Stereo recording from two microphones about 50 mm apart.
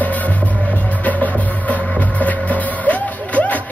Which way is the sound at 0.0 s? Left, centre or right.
Left.